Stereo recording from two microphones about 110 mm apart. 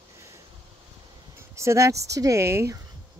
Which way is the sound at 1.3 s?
25° right (ahead or behind).